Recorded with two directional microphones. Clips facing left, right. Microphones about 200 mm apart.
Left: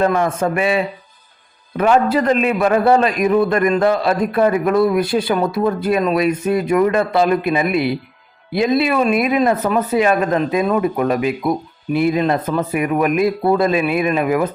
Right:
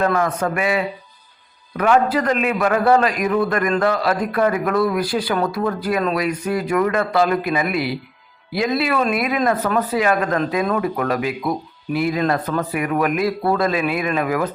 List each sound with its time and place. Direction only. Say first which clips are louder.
0.0 s a man's voice: left 3 dB; 25° left (ahead or behind)